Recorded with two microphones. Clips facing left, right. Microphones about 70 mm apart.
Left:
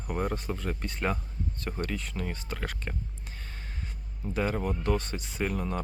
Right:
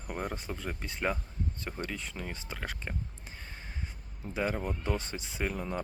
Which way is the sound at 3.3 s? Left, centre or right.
Centre.